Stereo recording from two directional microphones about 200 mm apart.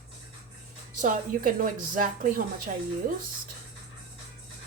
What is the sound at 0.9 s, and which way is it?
A woman's voice, 40° right (ahead or behind).